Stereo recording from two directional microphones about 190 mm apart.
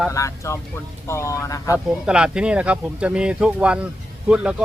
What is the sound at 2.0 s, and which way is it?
Speech, 5° right (ahead or behind).